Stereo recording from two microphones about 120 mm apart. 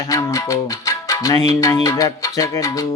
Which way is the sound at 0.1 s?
25° left (ahead or behind).